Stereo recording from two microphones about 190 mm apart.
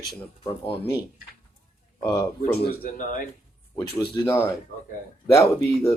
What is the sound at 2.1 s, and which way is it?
Speech, 20° left (ahead or behind).